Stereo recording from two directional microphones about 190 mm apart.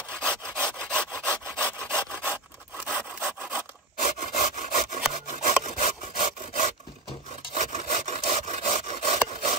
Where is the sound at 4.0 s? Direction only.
40° right (ahead or behind).